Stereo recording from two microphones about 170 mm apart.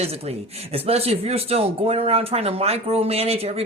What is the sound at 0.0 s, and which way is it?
Speech, 35° right (ahead or behind).